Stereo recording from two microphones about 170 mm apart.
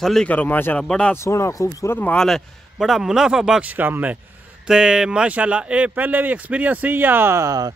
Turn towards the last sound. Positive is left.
turn(degrees=-20)  # may be behind; listen again after turning